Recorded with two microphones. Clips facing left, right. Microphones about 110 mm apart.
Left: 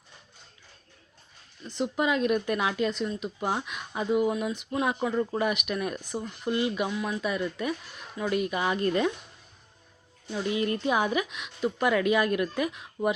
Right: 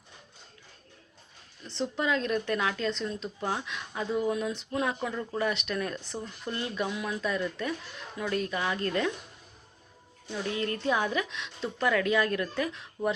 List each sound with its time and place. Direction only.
1.6 s speech: 15° left (ahead or behind)
10.5 s speech: 15° left (ahead or behind)